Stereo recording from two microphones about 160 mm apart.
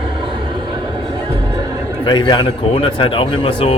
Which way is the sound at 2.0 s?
30° left (ahead or behind).